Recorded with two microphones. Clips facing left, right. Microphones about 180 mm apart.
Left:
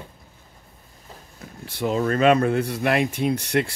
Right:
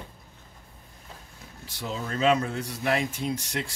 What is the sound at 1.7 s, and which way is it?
Speech, 60° left (ahead or behind).